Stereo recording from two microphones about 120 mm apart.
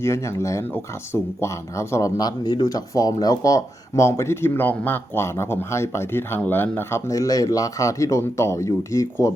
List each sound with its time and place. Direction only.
0.0 s speech: 25° left (ahead or behind)
7.1 s speech: 30° left (ahead or behind)